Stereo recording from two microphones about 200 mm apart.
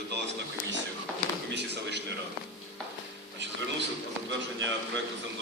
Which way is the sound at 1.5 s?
60° right (ahead or behind).